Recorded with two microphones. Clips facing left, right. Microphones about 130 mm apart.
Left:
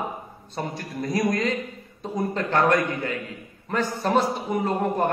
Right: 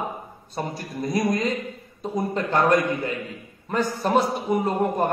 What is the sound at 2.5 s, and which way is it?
Speech, 25° right (ahead or behind).